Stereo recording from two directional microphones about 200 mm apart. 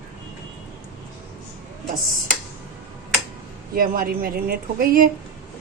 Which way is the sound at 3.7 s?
45° right (ahead or behind).